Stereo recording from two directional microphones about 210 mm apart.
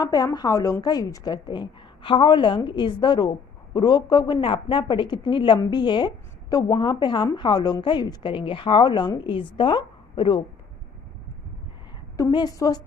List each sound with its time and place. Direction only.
0.0 s a woman's voice: 15° left (ahead or behind)
12.1 s a woman's voice: 20° left (ahead or behind)